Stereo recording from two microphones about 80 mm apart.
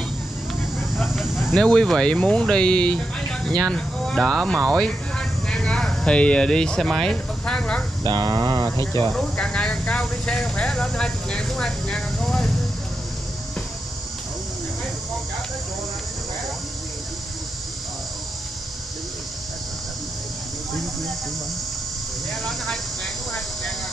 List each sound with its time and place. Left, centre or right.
0.7 s a sound: centre
1.6 s speech: centre
8.0 s speech: right
9.1 s speech: centre